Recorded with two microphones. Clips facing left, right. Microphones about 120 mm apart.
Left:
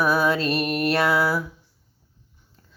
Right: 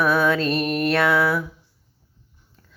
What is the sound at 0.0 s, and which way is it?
Music, 5° left (ahead or behind).